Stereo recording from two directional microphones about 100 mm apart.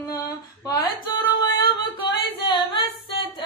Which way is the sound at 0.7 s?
40° left (ahead or behind).